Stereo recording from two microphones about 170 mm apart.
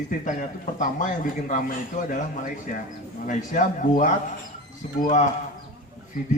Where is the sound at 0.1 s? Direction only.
50° left (ahead or behind).